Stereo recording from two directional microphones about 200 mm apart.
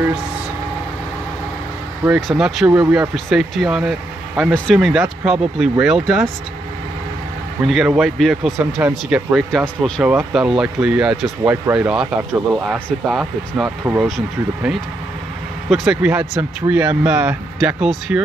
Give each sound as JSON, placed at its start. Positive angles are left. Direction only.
{"t": 2.0, "sound": "speech", "side_deg": 0}
{"t": 7.6, "sound": "speech", "side_deg": 0}